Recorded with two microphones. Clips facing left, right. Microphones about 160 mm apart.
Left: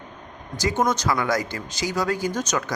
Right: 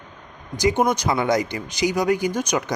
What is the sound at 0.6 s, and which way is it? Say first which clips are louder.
Speech: right 3 dB; 15° right (ahead or behind).